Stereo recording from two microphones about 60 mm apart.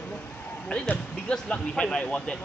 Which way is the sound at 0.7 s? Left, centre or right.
Left.